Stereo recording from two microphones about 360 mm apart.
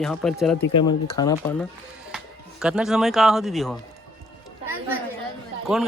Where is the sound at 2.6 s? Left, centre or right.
Centre.